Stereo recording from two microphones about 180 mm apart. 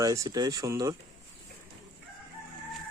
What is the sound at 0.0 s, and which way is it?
Speech, 20° right (ahead or behind).